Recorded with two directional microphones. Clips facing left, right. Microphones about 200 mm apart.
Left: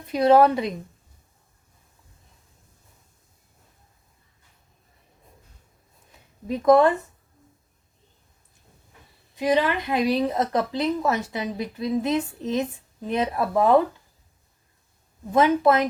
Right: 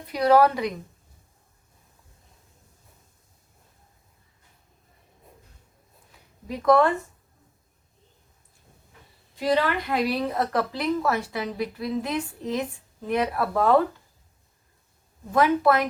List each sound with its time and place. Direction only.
0.1 s a woman's voice: 25° left (ahead or behind)
6.1 s a sound: 20° left (ahead or behind)
9.3 s a woman's voice: 20° left (ahead or behind)
15.3 s a woman's voice: 20° left (ahead or behind)